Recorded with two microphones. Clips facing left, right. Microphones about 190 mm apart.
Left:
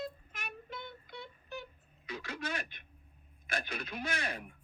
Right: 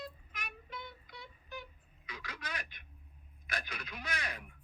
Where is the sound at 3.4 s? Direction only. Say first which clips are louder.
Left 4 dB; 25° left (ahead or behind).